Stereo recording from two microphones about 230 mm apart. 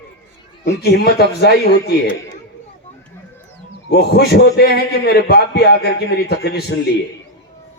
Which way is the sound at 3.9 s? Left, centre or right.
Left.